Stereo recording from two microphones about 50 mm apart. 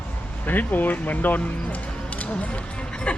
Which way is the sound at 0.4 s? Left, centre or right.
Left.